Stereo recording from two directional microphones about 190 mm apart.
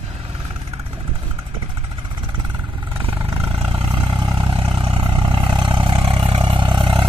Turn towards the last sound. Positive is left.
turn(degrees=-25)  # may be behind; listen again after turning